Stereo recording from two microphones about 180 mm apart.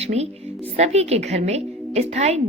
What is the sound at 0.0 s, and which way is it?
A woman's voice, 35° right (ahead or behind).